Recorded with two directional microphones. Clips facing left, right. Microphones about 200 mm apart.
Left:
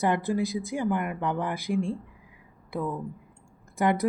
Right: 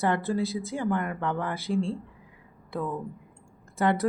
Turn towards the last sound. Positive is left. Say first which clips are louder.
# even
turn(degrees=15)  # may be behind; listen again after turning